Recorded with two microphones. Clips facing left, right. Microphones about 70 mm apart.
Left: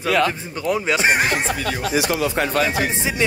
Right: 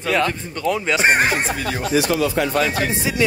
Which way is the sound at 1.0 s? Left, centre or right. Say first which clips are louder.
Right 3 dB; right.